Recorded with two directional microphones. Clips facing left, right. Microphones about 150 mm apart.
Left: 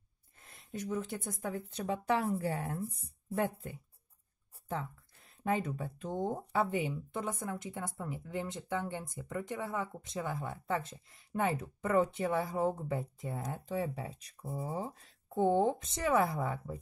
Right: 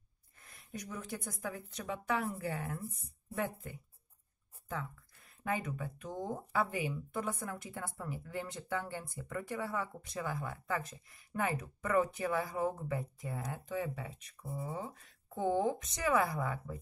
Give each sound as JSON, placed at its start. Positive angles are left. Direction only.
{"t": 0.4, "sound": "a sound", "side_deg": 25}
{"t": 0.7, "sound": "speech", "side_deg": 25}
{"t": 4.6, "sound": "speech", "side_deg": 30}